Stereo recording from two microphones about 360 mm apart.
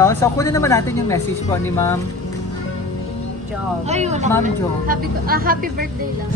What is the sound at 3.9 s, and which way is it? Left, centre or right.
Speech, centre.